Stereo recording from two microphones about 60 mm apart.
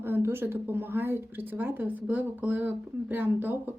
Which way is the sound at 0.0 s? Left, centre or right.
Right.